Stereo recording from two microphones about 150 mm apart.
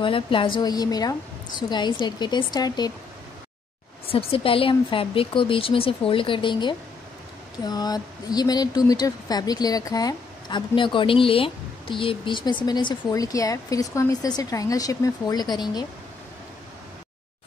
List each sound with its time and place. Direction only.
0.0 s speech: 35° left (ahead or behind)
4.1 s speech: 40° left (ahead or behind)